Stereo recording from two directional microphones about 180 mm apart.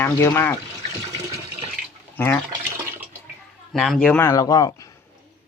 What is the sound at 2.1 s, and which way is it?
Speech, 10° left (ahead or behind).